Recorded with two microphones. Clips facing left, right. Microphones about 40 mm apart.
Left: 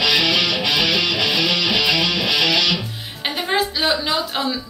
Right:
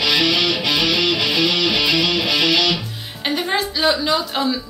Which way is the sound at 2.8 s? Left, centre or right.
Centre.